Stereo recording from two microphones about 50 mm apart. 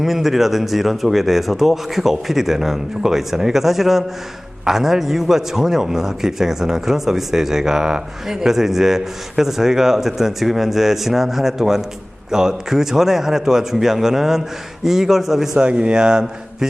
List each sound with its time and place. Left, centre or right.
0.0 s a man's voice: centre
15.6 s a man's voice: centre